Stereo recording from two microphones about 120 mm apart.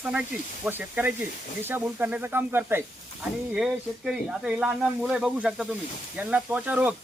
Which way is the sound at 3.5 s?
5° right (ahead or behind).